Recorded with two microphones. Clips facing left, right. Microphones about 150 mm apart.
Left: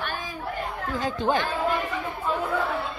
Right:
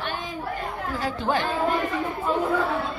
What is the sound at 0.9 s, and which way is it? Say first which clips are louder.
Speech: left 1 dB; 20° left (ahead or behind).